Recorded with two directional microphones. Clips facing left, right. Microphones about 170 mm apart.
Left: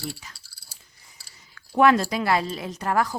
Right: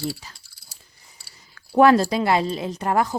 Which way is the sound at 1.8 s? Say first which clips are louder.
Right 4 dB; 35° right (ahead or behind).